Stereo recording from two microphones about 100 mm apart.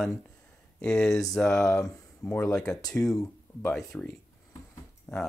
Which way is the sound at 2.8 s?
40° left (ahead or behind).